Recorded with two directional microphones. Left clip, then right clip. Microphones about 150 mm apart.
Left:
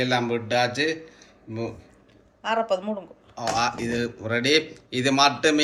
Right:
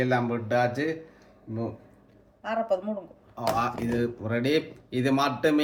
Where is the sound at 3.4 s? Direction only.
90° right.